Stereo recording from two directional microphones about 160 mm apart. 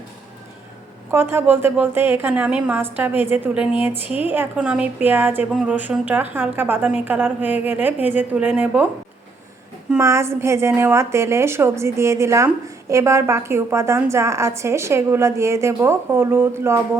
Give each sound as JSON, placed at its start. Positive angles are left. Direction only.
{"t": 1.1, "sound": "a woman's voice", "side_deg": -15}
{"t": 10.0, "sound": "a woman's voice", "side_deg": -20}